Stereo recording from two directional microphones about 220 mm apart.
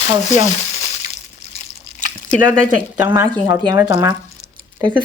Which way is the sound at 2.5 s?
10° right (ahead or behind).